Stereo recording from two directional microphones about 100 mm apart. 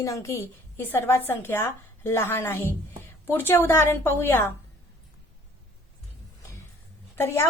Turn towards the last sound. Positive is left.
turn(degrees=25)  # may be behind; listen again after turning